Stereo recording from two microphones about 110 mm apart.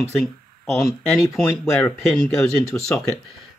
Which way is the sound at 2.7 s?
15° left (ahead or behind).